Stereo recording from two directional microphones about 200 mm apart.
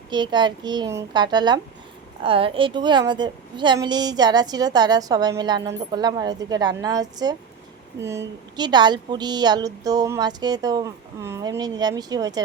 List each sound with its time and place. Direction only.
0.1 s a woman's voice: 20° right (ahead or behind)